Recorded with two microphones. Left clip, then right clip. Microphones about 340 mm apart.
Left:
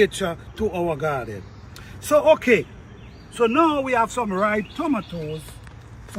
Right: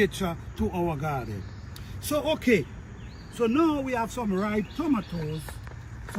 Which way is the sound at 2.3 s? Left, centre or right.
Centre.